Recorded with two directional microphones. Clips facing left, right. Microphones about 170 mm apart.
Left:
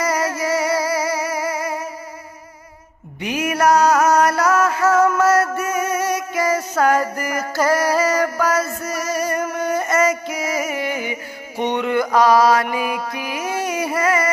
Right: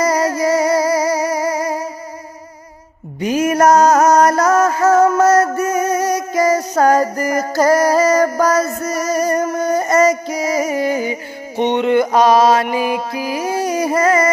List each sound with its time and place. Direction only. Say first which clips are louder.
0.0 s music: right 5 dB; 35° right (ahead or behind)
3.2 s music: right 6 dB; 40° right (ahead or behind)
11.5 s mantra: right 5 dB; 25° right (ahead or behind); by 14.3 s 40° right (ahead or behind)